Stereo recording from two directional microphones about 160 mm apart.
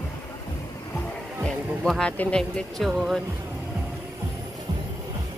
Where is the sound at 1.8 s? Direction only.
5° left (ahead or behind).